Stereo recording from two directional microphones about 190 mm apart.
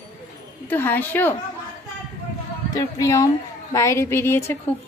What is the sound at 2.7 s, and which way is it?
A woman's voice, 15° left (ahead or behind).